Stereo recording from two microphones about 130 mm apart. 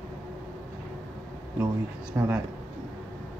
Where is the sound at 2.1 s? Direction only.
15° right (ahead or behind).